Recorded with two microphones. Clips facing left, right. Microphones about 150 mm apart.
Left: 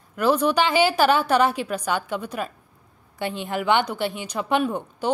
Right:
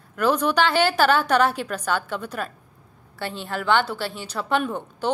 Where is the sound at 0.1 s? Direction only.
10° left (ahead or behind).